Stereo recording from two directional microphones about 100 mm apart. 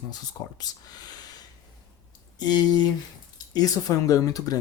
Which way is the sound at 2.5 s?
45° left (ahead or behind).